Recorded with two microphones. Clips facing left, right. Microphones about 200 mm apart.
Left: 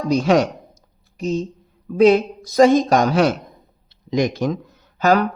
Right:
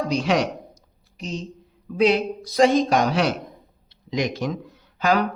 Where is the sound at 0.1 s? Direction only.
45° left (ahead or behind).